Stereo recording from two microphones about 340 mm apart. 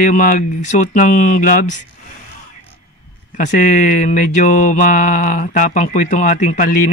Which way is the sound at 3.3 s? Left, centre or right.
Left.